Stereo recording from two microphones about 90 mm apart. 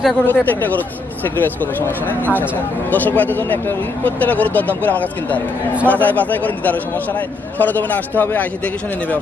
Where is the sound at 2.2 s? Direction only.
20° left (ahead or behind).